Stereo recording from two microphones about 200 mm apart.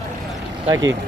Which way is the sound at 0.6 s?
20° right (ahead or behind).